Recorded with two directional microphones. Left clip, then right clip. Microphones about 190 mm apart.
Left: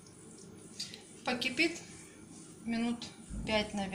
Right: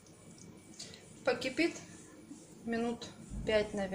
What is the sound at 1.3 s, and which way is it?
Speech, 45° right (ahead or behind).